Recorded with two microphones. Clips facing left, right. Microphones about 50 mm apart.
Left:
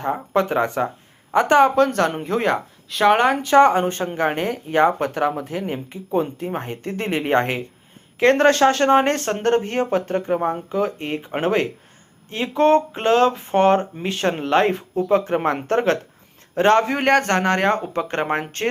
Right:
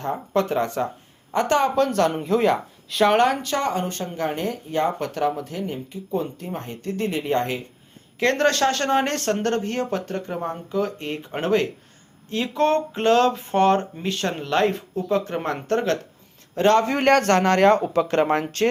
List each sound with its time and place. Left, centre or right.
0.0 s speech: centre
1.7 s speech: centre
3.1 s speech: centre; by 7.6 s left
8.2 s speech: left
18.1 s speech: left